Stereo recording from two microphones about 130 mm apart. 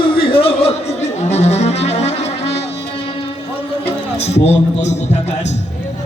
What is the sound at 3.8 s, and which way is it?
A man's voice, 50° left (ahead or behind).